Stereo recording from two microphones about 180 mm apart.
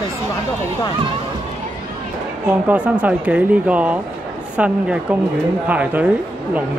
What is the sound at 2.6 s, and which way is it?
Speech, 10° right (ahead or behind).